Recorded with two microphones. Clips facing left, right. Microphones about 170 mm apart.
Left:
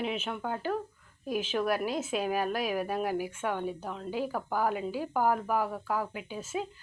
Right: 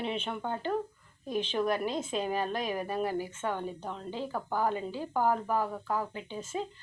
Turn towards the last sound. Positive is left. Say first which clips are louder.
# left 1 dB
turn(degrees=10)  # may be behind; listen again after turning